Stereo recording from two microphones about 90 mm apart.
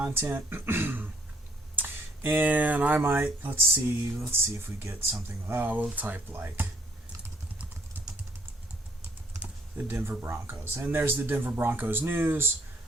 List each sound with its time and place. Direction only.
0.0 s speech: 25° right (ahead or behind)
9.4 s speech: 20° right (ahead or behind)